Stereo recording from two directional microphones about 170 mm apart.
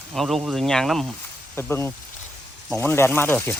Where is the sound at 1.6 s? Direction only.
15° left (ahead or behind).